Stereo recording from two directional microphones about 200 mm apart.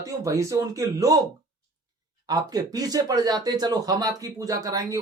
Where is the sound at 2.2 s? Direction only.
20° right (ahead or behind).